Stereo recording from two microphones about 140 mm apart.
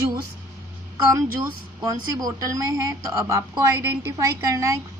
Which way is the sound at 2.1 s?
25° right (ahead or behind).